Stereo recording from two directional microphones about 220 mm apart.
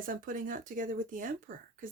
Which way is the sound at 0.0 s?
40° right (ahead or behind).